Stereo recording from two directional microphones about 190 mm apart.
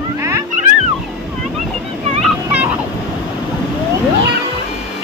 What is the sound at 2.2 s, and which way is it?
Turkey, 5° right (ahead or behind).